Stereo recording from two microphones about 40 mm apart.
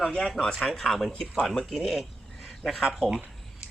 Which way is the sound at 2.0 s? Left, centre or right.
Centre.